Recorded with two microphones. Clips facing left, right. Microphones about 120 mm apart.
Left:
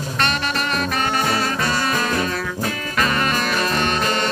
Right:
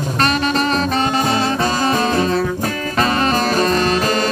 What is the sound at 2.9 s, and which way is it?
Music, 35° right (ahead or behind).